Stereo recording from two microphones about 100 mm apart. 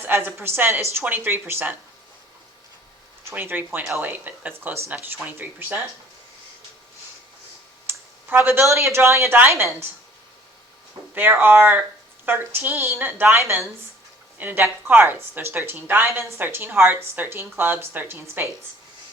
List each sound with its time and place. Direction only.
0.0 s speech: 20° right (ahead or behind)
3.2 s speech: 20° right (ahead or behind)
7.9 s speech: 20° right (ahead or behind)
11.1 s speech: 20° right (ahead or behind)